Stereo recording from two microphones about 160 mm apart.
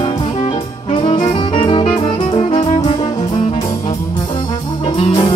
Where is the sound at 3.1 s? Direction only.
30° left (ahead or behind).